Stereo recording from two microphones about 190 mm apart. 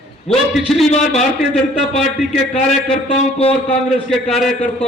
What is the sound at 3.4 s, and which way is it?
Speech, 30° left (ahead or behind).